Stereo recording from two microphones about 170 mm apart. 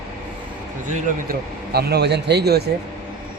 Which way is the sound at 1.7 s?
70° right (ahead or behind).